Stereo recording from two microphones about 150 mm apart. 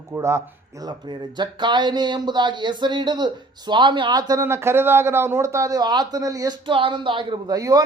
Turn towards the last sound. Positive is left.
turn(degrees=-25)  # may be behind; listen again after turning